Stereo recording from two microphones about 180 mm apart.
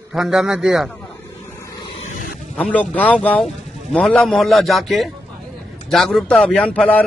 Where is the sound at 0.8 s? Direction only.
10° left (ahead or behind).